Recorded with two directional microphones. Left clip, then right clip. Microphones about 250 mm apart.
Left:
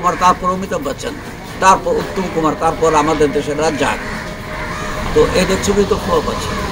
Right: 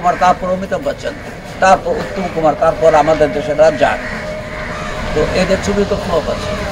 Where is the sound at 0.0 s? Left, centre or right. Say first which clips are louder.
Right 1 dB; centre.